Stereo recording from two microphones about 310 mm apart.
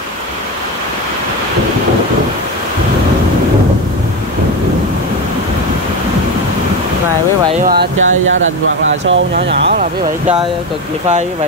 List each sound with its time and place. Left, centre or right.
7.6 s speech: right